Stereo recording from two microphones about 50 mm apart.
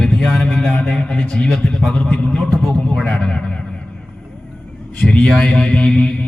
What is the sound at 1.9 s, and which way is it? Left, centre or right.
A man's voice, left.